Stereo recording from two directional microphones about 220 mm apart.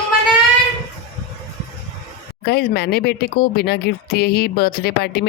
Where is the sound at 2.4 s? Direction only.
45° left (ahead or behind).